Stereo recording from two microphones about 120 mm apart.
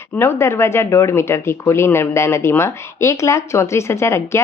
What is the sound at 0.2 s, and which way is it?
Speech, 20° left (ahead or behind).